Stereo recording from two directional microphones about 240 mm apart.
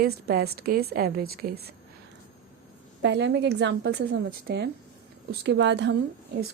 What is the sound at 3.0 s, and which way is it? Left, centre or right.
Speech, right.